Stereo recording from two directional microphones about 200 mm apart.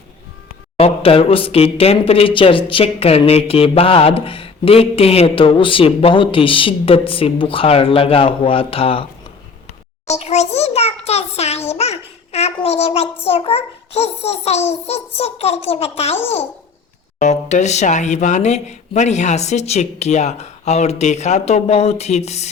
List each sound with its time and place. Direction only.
0.8 s speech: 30° left (ahead or behind)
10.2 s speech: 35° left (ahead or behind)
17.2 s speech: 35° left (ahead or behind)